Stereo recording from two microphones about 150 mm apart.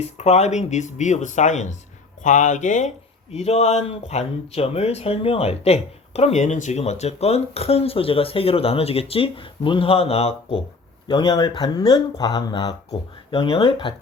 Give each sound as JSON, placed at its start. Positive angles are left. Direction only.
{"t": 0.2, "sound": "speech", "side_deg": 45}
{"t": 11.1, "sound": "speech", "side_deg": 30}